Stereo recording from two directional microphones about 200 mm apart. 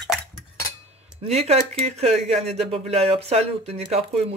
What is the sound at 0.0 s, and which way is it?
Dishes, centre (ahead or behind).